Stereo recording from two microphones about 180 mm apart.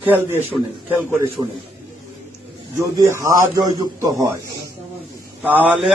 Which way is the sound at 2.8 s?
15° right (ahead or behind).